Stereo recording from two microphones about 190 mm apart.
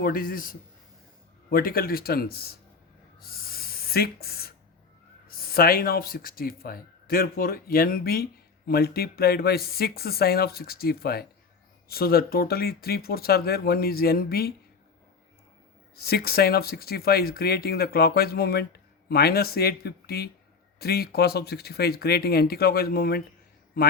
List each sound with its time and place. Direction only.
0.0 s speech: 50° left (ahead or behind)
3.2 s a sound: 50° left (ahead or behind)
5.3 s speech: 50° left (ahead or behind)
16.0 s speech: 55° left (ahead or behind)